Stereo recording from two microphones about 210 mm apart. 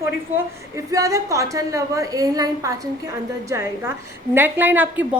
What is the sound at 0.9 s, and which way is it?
A woman's voice, 15° right (ahead or behind).